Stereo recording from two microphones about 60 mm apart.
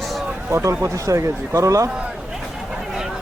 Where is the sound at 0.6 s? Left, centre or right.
Right.